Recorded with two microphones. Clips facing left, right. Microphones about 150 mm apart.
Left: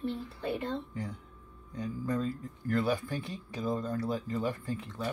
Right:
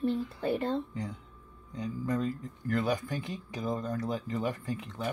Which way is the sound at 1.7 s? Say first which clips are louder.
Right 1 dB; 20° right (ahead or behind).